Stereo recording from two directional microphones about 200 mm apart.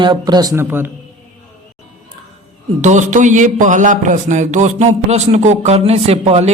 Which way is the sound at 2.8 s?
35° right (ahead or behind).